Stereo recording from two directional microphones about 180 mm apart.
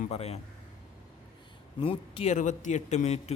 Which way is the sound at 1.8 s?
30° left (ahead or behind).